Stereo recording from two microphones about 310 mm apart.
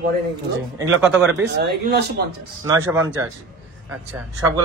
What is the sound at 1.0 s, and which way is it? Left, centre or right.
Speech, centre.